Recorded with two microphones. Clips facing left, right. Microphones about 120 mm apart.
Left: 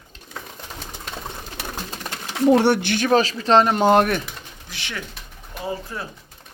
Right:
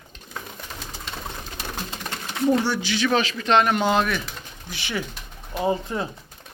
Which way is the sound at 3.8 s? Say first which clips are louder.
Left 5 dB; 50° left (ahead or behind).